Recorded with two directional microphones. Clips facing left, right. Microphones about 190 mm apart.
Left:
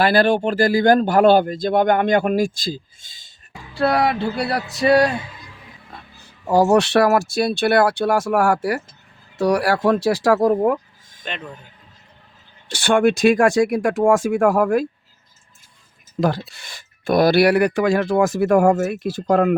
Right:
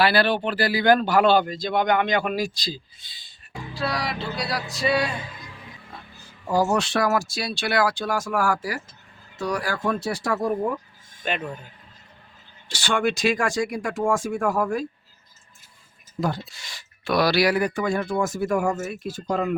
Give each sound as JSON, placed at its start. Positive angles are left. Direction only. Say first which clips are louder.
{"t": 0.0, "sound": "speech", "louder": "left 5 dB", "side_deg": 45}
{"t": 3.8, "sound": "speech", "louder": "left 10 dB", "side_deg": 60}
{"t": 6.5, "sound": "speech", "louder": "left 7 dB", "side_deg": 70}
{"t": 11.2, "sound": "speech", "louder": "right 4 dB", "side_deg": -5}
{"t": 12.7, "sound": "speech", "louder": "left 8 dB", "side_deg": 55}
{"t": 16.2, "sound": "speech", "louder": "left 6 dB", "side_deg": 75}